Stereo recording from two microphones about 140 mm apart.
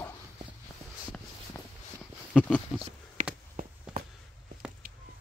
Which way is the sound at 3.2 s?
70° right (ahead or behind).